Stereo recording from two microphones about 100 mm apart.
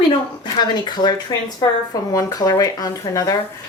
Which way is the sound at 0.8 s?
45° left (ahead or behind).